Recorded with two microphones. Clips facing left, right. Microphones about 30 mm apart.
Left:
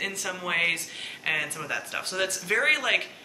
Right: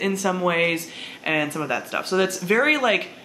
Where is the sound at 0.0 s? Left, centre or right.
Centre.